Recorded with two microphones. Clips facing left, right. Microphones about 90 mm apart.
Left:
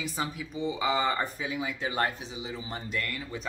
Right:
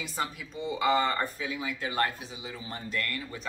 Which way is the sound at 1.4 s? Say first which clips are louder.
Left 1 dB; 20° left (ahead or behind).